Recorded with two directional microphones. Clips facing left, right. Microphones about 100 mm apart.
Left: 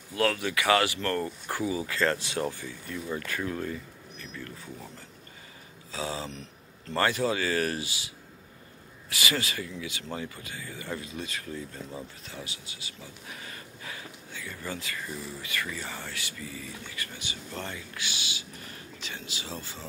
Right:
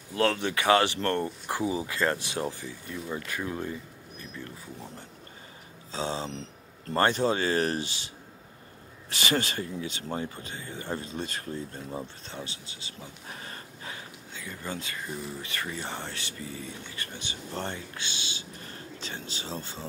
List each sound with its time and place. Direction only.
0.1 s speech: 30° right (ahead or behind)
9.1 s speech: 35° right (ahead or behind)